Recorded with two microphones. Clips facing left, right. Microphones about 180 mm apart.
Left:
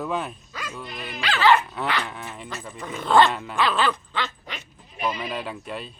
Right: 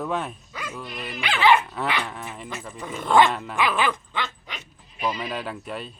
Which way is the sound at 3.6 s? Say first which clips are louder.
Left 1 dB; 10° right (ahead or behind).